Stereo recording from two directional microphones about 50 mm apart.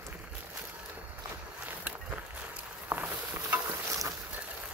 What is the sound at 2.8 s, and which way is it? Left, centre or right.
Walk, right.